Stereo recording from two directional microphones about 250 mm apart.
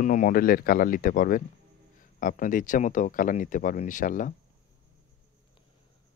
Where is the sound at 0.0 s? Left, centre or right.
Left.